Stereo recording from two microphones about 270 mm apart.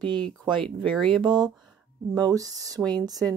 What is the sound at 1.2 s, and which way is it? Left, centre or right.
Speech, centre.